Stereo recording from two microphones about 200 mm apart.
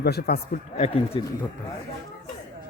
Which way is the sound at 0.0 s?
55° left (ahead or behind).